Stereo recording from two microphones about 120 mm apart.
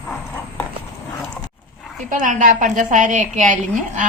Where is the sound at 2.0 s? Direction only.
90° right.